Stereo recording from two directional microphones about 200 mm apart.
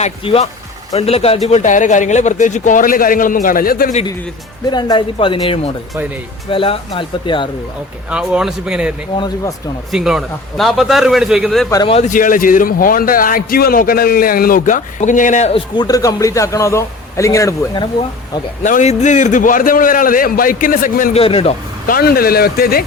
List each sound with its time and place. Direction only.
0.0 s a man's voice: 30° left (ahead or behind); by 3.9 s 45° left (ahead or behind)
4.7 s speech: 20° left (ahead or behind)
8.1 s a man's voice: 5° right (ahead or behind)
9.1 s speech: 20° left (ahead or behind)
9.9 s a man's voice: centre (ahead or behind)
11.7 s a man's voice: 25° left (ahead or behind)
18.6 s a man's voice: 35° left (ahead or behind)
21.2 s speech: 30° left (ahead or behind)
21.8 s a man's voice: 50° left (ahead or behind)